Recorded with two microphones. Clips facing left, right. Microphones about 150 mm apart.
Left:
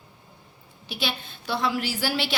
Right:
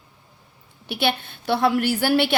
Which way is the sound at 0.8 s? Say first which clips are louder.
Right 7 dB; 60° right (ahead or behind).